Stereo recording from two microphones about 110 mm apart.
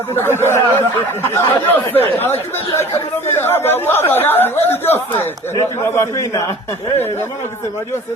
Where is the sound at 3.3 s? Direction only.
20° left (ahead or behind).